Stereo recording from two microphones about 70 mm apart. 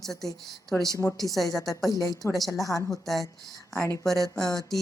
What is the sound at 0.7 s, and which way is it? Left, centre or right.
Speech, left.